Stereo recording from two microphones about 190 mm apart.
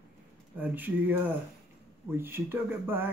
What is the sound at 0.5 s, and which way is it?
Speech, 10° right (ahead or behind).